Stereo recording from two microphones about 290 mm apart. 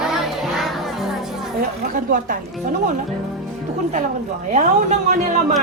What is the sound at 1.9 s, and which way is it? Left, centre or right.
Speech, right.